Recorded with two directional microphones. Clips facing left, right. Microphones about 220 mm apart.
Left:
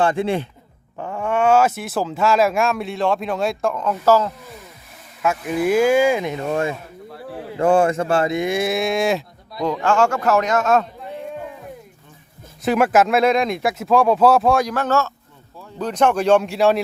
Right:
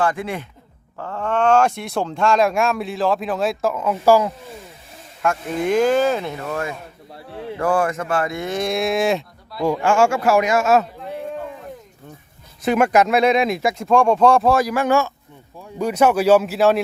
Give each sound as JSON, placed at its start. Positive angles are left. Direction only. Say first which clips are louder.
{"t": 0.0, "sound": "a man's voice", "louder": "left 3 dB", "side_deg": 25}
{"t": 0.9, "sound": "speech", "louder": "left 1 dB", "side_deg": 10}
{"t": 5.2, "sound": "speech", "louder": "left 1 dB", "side_deg": 5}
{"t": 9.6, "sound": "speech", "louder": "right 1 dB", "side_deg": -10}
{"t": 12.6, "sound": "speech", "louder": "even", "side_deg": 0}